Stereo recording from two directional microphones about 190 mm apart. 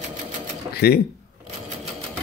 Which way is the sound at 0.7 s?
55° left (ahead or behind).